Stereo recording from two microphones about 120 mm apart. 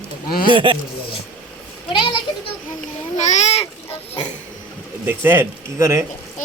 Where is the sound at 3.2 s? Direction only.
75° left (ahead or behind).